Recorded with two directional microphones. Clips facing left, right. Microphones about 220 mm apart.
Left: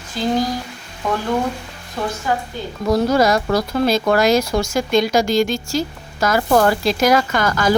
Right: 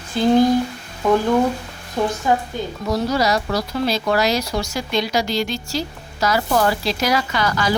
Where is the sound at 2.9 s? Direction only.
50° left (ahead or behind).